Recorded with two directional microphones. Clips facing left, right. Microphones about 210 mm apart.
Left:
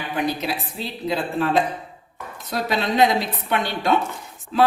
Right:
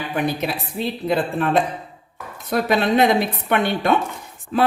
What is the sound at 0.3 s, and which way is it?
Speech, 55° right (ahead or behind).